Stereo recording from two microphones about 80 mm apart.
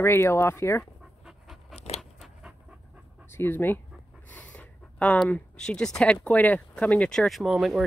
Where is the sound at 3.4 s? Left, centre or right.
Left.